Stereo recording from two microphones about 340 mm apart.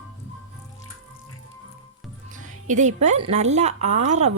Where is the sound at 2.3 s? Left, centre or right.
Right.